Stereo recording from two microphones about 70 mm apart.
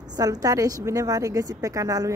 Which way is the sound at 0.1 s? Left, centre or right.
Right.